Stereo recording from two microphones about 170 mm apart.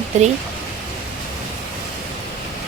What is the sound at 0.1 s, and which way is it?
Speech, 45° right (ahead or behind).